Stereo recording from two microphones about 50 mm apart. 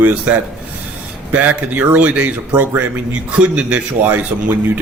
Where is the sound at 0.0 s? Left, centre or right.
Right.